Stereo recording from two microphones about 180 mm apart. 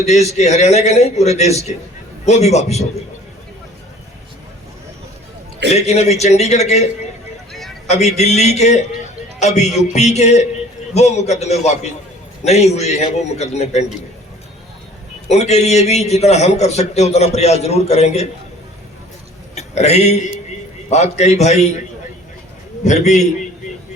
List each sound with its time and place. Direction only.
0.0 s a man's voice: 40° left (ahead or behind)
5.7 s a man's voice: 35° left (ahead or behind)
7.9 s a man's voice: 40° left (ahead or behind)
15.3 s a man's voice: 40° left (ahead or behind)
19.5 s a man's voice: 40° left (ahead or behind)
22.8 s a man's voice: 40° left (ahead or behind)